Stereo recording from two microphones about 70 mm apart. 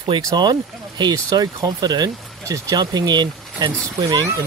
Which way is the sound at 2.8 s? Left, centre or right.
Right.